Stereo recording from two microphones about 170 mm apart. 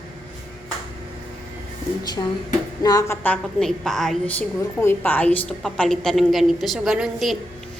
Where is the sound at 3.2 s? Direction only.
5° left (ahead or behind).